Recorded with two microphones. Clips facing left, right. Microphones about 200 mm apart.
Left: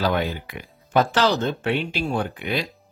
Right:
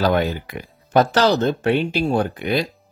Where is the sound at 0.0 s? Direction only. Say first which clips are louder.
Right 4 dB; 40° right (ahead or behind).